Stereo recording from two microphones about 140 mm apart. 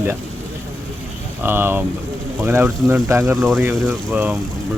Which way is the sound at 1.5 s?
15° right (ahead or behind).